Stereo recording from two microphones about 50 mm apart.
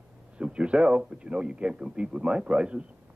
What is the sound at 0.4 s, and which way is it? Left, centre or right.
A man's voice, right.